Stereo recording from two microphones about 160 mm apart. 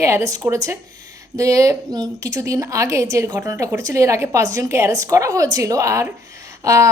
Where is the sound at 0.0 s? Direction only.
20° right (ahead or behind).